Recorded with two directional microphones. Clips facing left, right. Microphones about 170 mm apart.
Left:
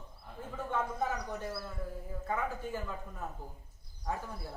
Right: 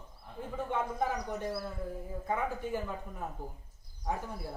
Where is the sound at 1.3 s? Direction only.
20° right (ahead or behind).